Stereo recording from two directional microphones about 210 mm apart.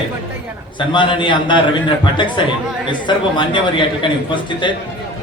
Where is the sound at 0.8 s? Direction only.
25° left (ahead or behind).